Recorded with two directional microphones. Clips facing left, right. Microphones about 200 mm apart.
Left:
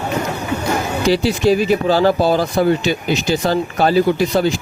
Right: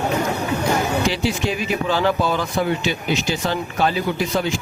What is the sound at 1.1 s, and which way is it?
Speech, 35° left (ahead or behind).